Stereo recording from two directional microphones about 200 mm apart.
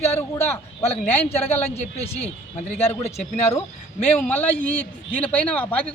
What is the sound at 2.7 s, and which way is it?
A man's voice, 10° left (ahead or behind).